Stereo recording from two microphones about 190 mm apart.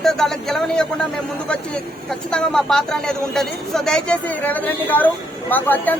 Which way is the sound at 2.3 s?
5° left (ahead or behind).